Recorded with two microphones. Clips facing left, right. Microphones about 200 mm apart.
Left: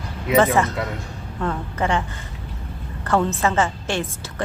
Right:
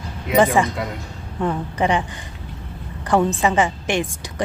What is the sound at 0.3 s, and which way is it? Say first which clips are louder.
A woman's voice: right 1 dB; 15° right (ahead or behind).